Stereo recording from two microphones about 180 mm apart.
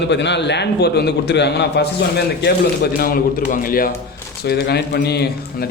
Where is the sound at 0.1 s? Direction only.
75° left (ahead or behind); by 3.9 s 55° left (ahead or behind).